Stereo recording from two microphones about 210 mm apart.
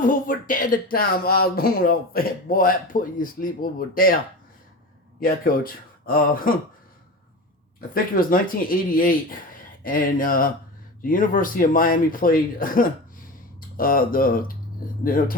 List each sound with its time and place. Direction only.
0.0 s speech: 40° left (ahead or behind)
5.2 s speech: 45° left (ahead or behind)
7.8 s speech: 40° left (ahead or behind)